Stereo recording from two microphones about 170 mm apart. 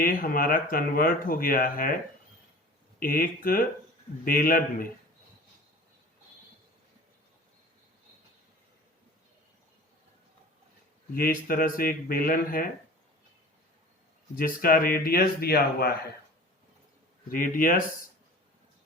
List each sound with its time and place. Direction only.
0.0 s speech: 55° left (ahead or behind)
3.0 s speech: 55° left (ahead or behind)
11.1 s speech: 60° left (ahead or behind)
14.3 s speech: 60° left (ahead or behind)
17.2 s speech: 55° left (ahead or behind)